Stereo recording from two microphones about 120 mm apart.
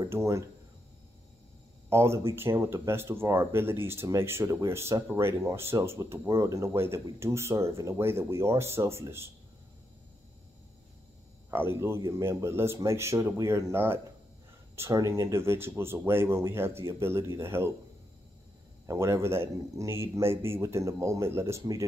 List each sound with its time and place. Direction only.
0.1 s speech: 25° right (ahead or behind)
1.9 s speech: 20° right (ahead or behind)
11.5 s speech: 20° right (ahead or behind)
18.9 s speech: 25° right (ahead or behind)